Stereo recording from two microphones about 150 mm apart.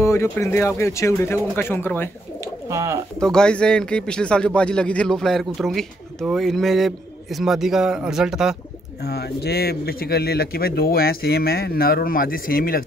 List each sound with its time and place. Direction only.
0.0 s speech: 20° left (ahead or behind)
2.7 s speech: 20° right (ahead or behind)
3.2 s a man's voice: 5° left (ahead or behind)
9.0 s speech: 90° left; by 12.8 s 75° left (ahead or behind)